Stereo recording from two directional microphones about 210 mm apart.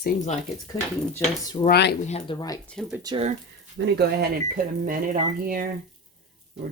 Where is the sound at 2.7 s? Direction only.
Centre (ahead or behind).